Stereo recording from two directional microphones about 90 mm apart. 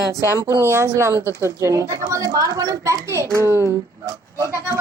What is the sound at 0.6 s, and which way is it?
Speech, 30° right (ahead or behind).